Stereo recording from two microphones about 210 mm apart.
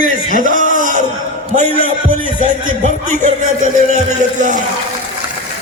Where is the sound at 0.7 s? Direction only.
40° right (ahead or behind).